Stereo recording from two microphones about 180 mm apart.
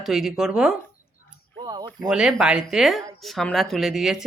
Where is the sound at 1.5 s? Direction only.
25° right (ahead or behind).